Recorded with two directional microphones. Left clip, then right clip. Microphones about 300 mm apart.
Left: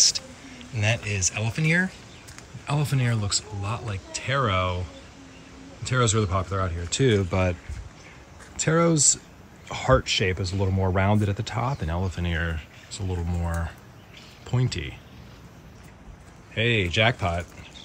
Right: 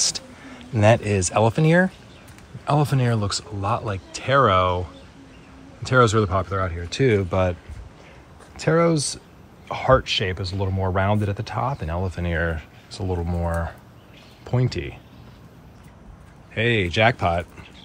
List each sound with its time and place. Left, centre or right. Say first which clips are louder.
0.0 s speech: left 3 dB; centre
5.9 s speech: right 7 dB; centre
8.5 s speech: right 3 dB; centre
16.5 s speech: right 2 dB; centre